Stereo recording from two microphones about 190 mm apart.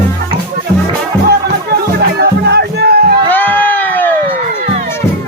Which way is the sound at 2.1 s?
60° right (ahead or behind).